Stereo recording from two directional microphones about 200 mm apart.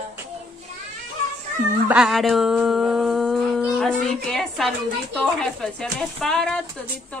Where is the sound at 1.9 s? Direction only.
5° right (ahead or behind).